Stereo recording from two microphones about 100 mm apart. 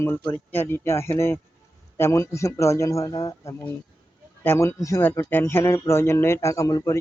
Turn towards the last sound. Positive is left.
turn(degrees=35)  # may be behind; listen again after turning